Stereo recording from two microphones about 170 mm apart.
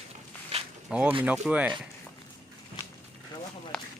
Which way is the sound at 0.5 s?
35° right (ahead or behind).